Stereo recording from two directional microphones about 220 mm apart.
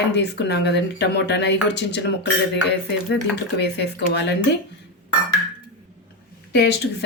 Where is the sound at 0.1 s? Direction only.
50° left (ahead or behind).